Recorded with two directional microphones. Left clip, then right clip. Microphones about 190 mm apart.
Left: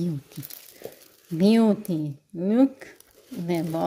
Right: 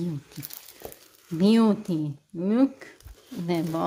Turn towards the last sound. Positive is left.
turn(degrees=15)  # may be behind; listen again after turning